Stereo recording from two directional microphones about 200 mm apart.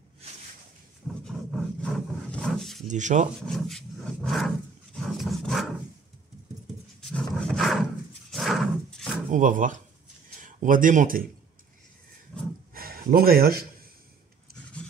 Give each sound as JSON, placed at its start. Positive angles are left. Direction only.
{"t": 1.0, "sound": "roaring cats", "side_deg": 0}
{"t": 1.8, "sound": "a sound", "side_deg": 5}
{"t": 2.9, "sound": "speech", "side_deg": -35}
{"t": 3.3, "sound": "roar", "side_deg": 0}
{"t": 7.0, "sound": "roar", "side_deg": 5}
{"t": 8.3, "sound": "dog", "side_deg": 0}
{"t": 9.3, "sound": "speech", "side_deg": -40}
{"t": 12.7, "sound": "a sound", "side_deg": -45}